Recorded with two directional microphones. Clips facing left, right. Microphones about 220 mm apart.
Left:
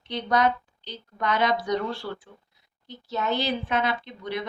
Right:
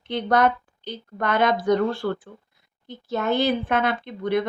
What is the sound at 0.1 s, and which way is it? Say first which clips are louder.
A woman's voice: right 3 dB; 50° right (ahead or behind).